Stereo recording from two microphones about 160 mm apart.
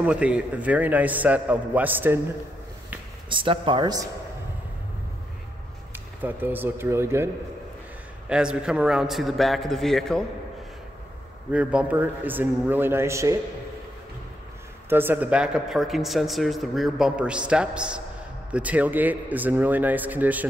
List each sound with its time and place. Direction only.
0.0 s a man's voice: 5° right (ahead or behind)
3.3 s speech: 30° right (ahead or behind)
6.2 s a man's voice: 10° right (ahead or behind)
8.3 s speech: 5° right (ahead or behind)
11.5 s a man's voice: 10° right (ahead or behind)
14.9 s a man's voice: 15° right (ahead or behind)